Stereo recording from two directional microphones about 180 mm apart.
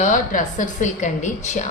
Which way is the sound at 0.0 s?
45° left (ahead or behind).